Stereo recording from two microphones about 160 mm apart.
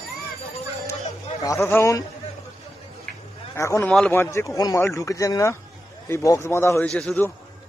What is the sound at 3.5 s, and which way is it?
A man's voice, 20° left (ahead or behind).